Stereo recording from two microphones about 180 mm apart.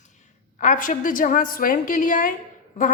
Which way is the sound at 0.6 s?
45° left (ahead or behind).